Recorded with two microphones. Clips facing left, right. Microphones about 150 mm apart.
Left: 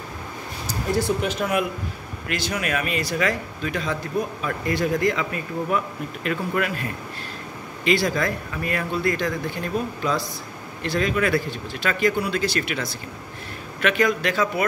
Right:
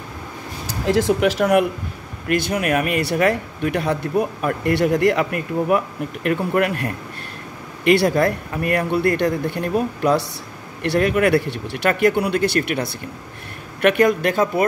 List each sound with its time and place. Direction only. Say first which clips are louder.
0.8 s speech: right 6 dB; 90° right; by 14.6 s 50° right (ahead or behind)